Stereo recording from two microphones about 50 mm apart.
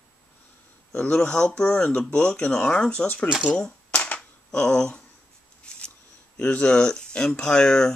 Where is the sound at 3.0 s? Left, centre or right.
Left.